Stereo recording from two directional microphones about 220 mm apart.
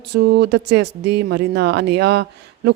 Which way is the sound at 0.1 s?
50° right (ahead or behind).